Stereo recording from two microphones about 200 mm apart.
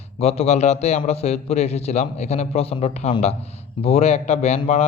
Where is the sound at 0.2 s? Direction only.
30° left (ahead or behind).